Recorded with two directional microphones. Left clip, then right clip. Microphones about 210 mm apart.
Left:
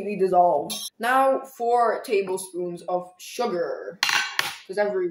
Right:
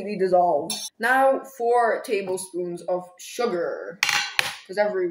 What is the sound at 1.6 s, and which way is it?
Speech, 5° left (ahead or behind).